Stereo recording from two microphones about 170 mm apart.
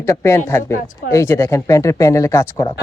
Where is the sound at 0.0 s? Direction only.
15° left (ahead or behind).